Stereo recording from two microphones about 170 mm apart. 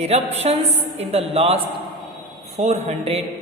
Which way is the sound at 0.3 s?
40° right (ahead or behind).